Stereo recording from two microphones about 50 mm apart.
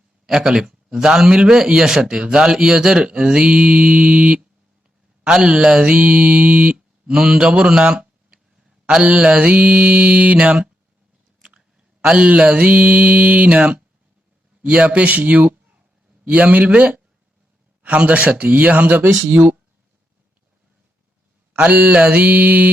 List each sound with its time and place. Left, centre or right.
0.3 s a man's voice: centre
5.2 s mantra: centre
7.1 s speech: centre
9.0 s mantra: right
12.0 s a man's voice: centre
12.3 s mantra: right
14.6 s speech: right
14.8 s speech: right
16.2 s mantra: right
21.5 s a man's voice: right